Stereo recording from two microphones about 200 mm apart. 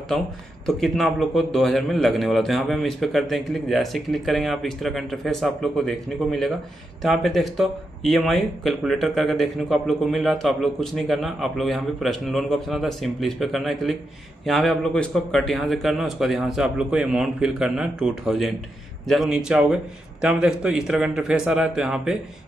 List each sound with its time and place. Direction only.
0.7 s speech: centre (ahead or behind)